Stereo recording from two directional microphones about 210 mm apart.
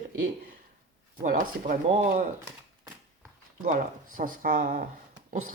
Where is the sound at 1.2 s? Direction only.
40° right (ahead or behind).